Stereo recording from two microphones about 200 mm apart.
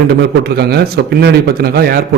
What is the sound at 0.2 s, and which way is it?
Speech, 55° right (ahead or behind).